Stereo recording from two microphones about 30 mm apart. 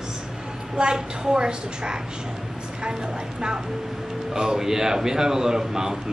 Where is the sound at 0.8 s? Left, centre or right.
Right.